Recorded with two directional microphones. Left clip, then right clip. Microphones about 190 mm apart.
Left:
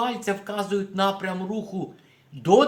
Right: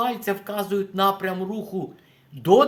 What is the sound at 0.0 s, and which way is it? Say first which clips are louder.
Speech: right 1 dB; 25° right (ahead or behind).